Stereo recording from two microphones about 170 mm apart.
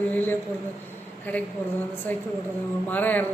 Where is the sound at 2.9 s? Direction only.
10° left (ahead or behind).